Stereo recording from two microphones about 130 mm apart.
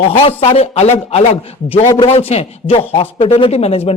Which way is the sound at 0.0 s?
45° left (ahead or behind).